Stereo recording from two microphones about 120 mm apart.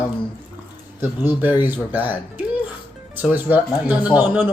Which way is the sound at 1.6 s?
15° right (ahead or behind).